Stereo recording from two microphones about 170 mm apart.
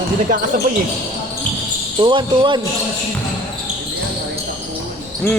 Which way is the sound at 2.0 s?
30° right (ahead or behind).